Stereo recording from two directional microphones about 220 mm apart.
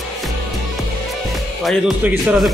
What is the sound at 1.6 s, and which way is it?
Speech, centre (ahead or behind).